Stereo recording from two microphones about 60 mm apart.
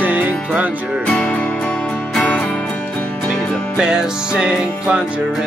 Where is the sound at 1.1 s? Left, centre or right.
Centre.